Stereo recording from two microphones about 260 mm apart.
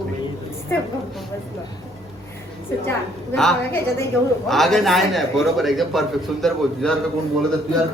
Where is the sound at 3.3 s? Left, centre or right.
Centre.